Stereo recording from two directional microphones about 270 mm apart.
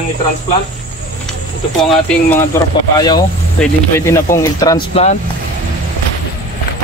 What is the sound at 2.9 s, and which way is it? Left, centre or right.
Speech, centre.